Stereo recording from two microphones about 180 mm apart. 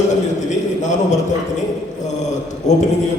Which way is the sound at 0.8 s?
40° left (ahead or behind).